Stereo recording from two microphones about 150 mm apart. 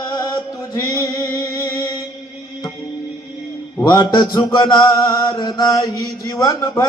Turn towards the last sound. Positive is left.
turn(degrees=25)  # may be behind; listen again after turning